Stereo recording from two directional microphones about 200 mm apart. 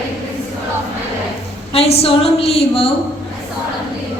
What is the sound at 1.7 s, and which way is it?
A woman's voice, 30° left (ahead or behind).